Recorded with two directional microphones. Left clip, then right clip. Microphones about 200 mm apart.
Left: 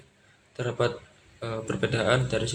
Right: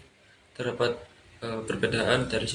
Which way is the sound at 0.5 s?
35° left (ahead or behind).